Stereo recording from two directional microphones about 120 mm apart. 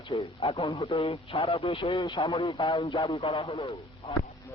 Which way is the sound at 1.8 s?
35° left (ahead or behind).